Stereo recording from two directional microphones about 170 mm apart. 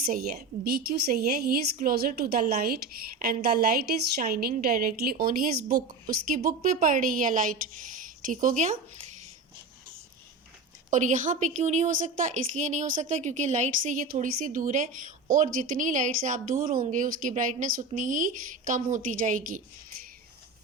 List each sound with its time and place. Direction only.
0.0 s a woman's voice: 60° right (ahead or behind)
10.9 s speech: 45° right (ahead or behind)